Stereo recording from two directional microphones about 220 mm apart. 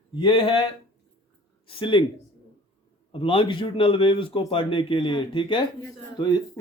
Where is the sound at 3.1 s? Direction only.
25° left (ahead or behind).